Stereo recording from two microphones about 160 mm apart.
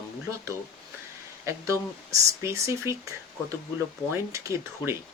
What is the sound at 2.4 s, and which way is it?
Speech, 15° right (ahead or behind).